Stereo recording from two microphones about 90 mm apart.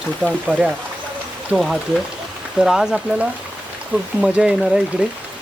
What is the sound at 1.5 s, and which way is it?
Speech, centre (ahead or behind).